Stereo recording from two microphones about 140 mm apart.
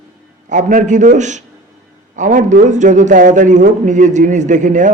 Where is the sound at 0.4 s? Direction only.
65° right (ahead or behind).